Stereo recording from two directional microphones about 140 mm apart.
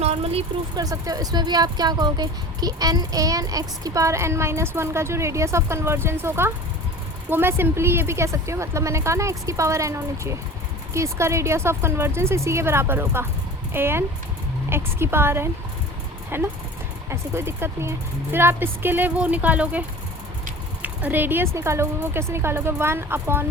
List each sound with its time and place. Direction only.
0.0 s vehicle: 45° right (ahead or behind)
0.8 s speech: 25° right (ahead or behind); by 19.8 s 10° right (ahead or behind)
20.8 s speech: 10° right (ahead or behind)